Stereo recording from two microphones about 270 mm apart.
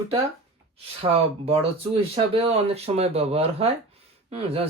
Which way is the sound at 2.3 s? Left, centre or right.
Right.